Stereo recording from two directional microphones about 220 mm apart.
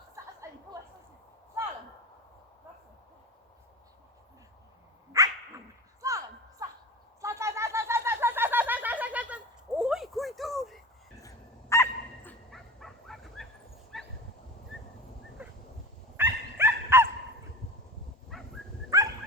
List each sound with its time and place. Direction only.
5.1 s dog: 15° right (ahead or behind)
6.0 s a sound: 15° right (ahead or behind); by 10.8 s centre (ahead or behind)
11.7 s dog: 10° left (ahead or behind)
16.1 s dog: 10° right (ahead or behind)
18.3 s dog: centre (ahead or behind)
18.9 s dog: 15° right (ahead or behind)